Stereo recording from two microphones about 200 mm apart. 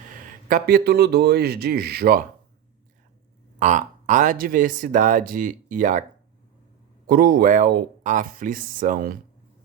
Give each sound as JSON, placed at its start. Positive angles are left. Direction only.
{"t": 0.4, "sound": "speech", "side_deg": -45}
{"t": 3.6, "sound": "speech", "side_deg": -40}
{"t": 7.1, "sound": "speech", "side_deg": -50}